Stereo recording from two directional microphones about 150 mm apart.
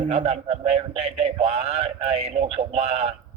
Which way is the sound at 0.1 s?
45° right (ahead or behind).